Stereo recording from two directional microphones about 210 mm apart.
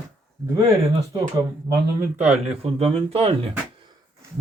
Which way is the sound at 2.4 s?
25° right (ahead or behind).